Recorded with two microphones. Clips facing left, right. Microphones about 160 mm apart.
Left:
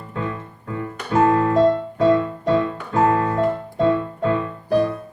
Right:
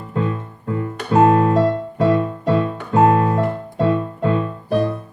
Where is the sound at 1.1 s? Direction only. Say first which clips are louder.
Right 3 dB; 20° right (ahead or behind).